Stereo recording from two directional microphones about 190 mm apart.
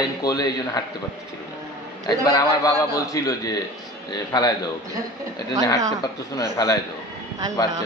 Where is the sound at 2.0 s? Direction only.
20° left (ahead or behind).